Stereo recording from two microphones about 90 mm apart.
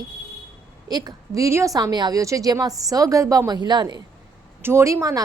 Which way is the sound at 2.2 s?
40° right (ahead or behind).